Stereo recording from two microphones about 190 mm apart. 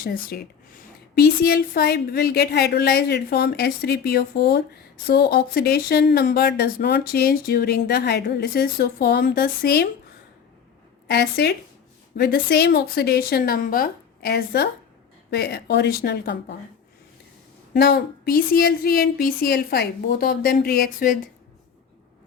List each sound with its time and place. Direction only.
0.0 s a woman's voice: 50° left (ahead or behind)
11.1 s a woman's voice: 60° left (ahead or behind)
17.7 s speech: 55° left (ahead or behind)